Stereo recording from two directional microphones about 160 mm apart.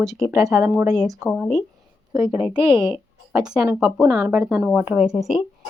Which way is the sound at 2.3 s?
10° right (ahead or behind).